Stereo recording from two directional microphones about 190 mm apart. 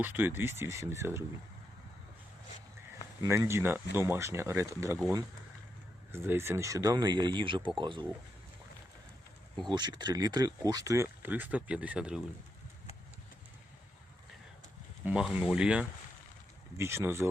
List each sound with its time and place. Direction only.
0.0 s speech: 10° right (ahead or behind)
3.2 s speech: 15° right (ahead or behind)
6.1 s speech: 10° right (ahead or behind)
9.6 s speech: 25° right (ahead or behind); by 12.2 s 5° right (ahead or behind)
15.0 s speech: 5° right (ahead or behind)